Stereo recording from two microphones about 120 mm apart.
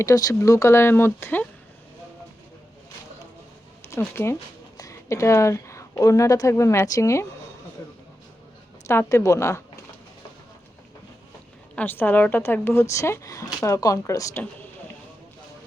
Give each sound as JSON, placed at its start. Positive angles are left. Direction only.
{"t": 0.0, "sound": "speech", "side_deg": 30}
{"t": 3.8, "sound": "a woman's voice", "side_deg": 20}
{"t": 8.9, "sound": "speech", "side_deg": 25}
{"t": 11.7, "sound": "speech", "side_deg": 15}